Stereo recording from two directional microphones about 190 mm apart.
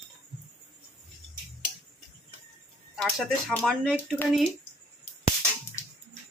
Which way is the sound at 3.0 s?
Centre (ahead or behind).